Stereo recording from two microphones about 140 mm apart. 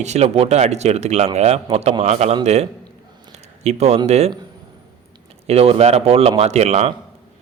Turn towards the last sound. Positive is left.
turn(degrees=-50)  # may be behind; listen again after turning